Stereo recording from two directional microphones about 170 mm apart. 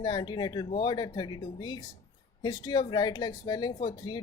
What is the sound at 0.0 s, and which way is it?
Speech, 25° left (ahead or behind).